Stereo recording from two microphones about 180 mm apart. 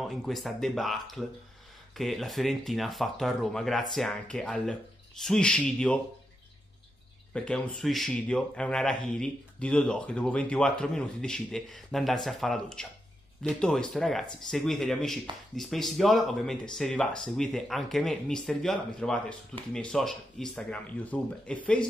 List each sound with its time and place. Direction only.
0.0 s speech: centre (ahead or behind)
7.3 s speech: 5° left (ahead or behind)